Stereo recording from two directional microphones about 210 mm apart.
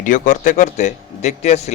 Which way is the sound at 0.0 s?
35° left (ahead or behind).